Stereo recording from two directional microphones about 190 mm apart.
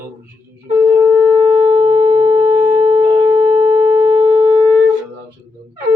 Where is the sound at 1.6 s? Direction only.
25° right (ahead or behind).